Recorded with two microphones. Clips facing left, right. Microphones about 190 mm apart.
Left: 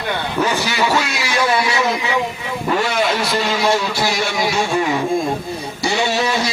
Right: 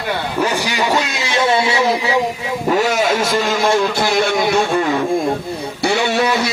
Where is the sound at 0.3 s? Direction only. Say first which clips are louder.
Even; 10° right (ahead or behind); by 2.1 s 35° right (ahead or behind).